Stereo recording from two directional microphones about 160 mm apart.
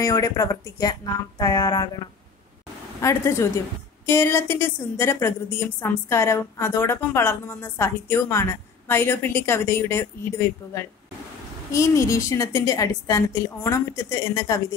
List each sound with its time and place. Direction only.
0.0 s a woman's voice: 20° left (ahead or behind)
3.0 s a woman's voice: 15° left (ahead or behind)